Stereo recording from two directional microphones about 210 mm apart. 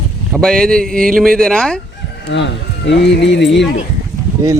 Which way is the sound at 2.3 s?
60° left (ahead or behind).